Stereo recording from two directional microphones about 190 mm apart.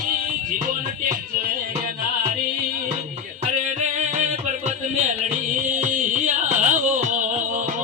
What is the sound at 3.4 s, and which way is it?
Music, 40° right (ahead or behind).